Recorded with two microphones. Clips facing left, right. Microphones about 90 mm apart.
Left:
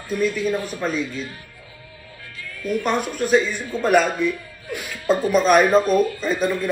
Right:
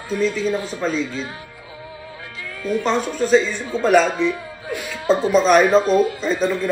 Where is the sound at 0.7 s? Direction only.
15° left (ahead or behind).